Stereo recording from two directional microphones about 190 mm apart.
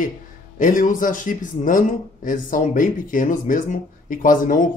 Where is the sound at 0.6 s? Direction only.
45° left (ahead or behind).